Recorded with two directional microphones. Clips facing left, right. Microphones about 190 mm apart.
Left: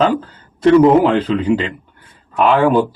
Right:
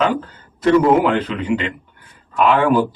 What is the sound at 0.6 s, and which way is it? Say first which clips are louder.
A man's voice: left 4 dB; 30° left (ahead or behind).